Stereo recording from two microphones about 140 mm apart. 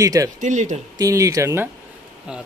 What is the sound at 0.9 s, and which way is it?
Speech, 25° right (ahead or behind).